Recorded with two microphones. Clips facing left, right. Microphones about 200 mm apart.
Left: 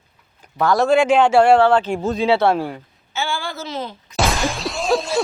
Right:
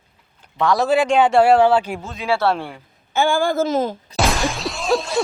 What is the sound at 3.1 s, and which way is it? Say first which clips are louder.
Speech: right 8 dB; 50° right (ahead or behind).